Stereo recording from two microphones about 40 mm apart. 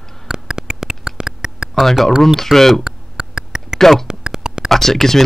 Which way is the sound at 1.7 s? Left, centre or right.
Centre.